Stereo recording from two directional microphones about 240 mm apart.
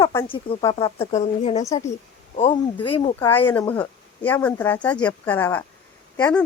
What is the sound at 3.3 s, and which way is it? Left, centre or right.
Speech, centre.